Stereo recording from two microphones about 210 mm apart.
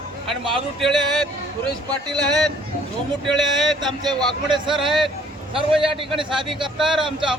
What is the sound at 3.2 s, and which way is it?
Speech, centre (ahead or behind).